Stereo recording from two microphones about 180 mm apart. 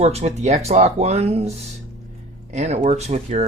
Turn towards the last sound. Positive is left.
turn(degrees=-40)  # may be behind; listen again after turning